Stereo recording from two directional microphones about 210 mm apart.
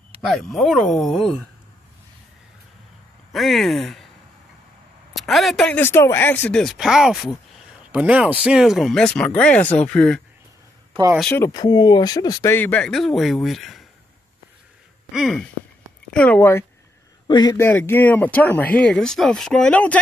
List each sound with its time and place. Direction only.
0.2 s speech: centre (ahead or behind)
3.3 s speech: centre (ahead or behind)
5.1 s speech: centre (ahead or behind)
10.9 s a sound: 20° right (ahead or behind)
11.1 s speech: 10° left (ahead or behind)
15.1 s speech: centre (ahead or behind)